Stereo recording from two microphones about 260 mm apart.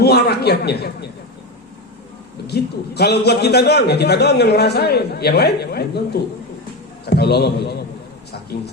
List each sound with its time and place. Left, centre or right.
0.0 s a sound: left
2.5 s a man's voice: left
7.0 s a man's voice: left